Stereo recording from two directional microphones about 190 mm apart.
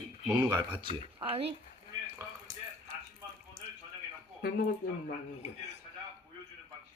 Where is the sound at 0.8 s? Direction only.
30° right (ahead or behind).